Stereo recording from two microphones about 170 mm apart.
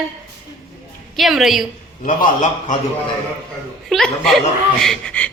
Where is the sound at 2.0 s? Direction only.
50° left (ahead or behind).